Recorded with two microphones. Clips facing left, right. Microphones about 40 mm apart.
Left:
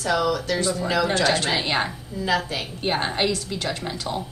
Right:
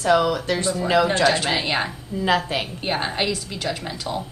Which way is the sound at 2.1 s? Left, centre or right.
Right.